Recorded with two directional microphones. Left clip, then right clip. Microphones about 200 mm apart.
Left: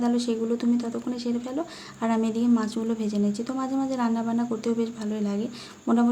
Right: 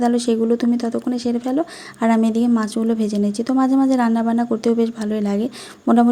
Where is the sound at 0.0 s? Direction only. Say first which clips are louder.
Right 8 dB; 35° right (ahead or behind).